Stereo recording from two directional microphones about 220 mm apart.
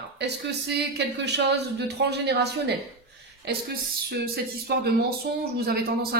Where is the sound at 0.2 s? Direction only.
50° right (ahead or behind).